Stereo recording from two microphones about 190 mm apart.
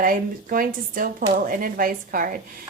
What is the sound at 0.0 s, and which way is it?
A woman's voice, 45° right (ahead or behind).